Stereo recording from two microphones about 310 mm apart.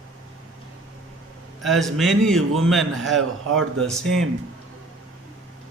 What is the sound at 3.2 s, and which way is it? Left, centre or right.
Speech, right.